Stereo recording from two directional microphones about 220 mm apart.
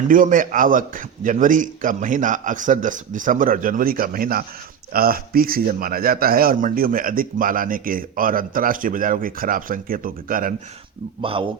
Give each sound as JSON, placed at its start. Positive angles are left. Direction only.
{"t": 0.1, "sound": "a man's voice", "side_deg": -40}
{"t": 11.2, "sound": "speech", "side_deg": -25}